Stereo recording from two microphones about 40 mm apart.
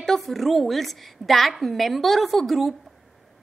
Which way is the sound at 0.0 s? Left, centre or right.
Centre.